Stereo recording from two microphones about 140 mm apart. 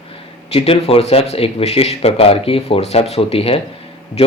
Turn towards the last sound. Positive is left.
turn(degrees=45)  # may be behind; listen again after turning